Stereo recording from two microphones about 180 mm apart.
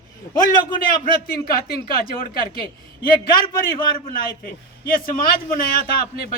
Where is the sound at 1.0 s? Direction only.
55° left (ahead or behind).